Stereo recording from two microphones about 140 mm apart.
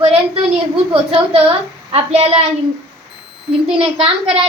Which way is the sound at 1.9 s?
45° right (ahead or behind).